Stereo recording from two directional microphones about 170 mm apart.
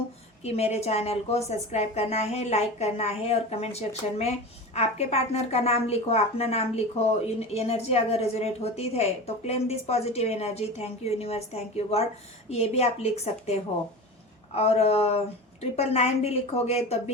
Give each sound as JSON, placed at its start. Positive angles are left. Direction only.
{"t": 0.4, "sound": "a woman's voice", "side_deg": 40}